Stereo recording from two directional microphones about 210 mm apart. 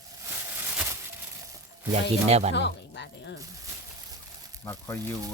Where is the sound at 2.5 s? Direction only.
55° left (ahead or behind).